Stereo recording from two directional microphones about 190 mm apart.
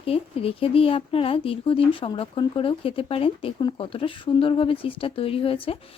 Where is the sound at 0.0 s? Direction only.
30° left (ahead or behind).